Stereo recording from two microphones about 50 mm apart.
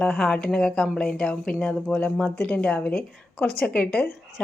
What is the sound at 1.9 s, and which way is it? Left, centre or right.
Speech, left.